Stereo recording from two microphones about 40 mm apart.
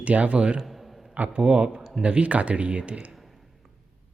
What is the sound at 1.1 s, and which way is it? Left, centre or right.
Speech, right.